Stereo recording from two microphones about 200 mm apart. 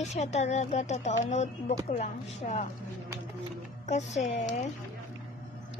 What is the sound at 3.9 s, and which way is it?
Speech, 35° left (ahead or behind).